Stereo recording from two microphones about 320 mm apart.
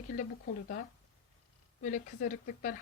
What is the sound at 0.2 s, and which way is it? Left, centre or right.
Speech, left.